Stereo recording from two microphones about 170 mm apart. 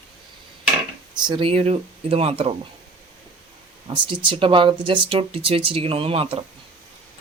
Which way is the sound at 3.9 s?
30° right (ahead or behind).